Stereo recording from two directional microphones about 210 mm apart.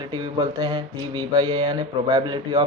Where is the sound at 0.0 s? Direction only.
20° right (ahead or behind).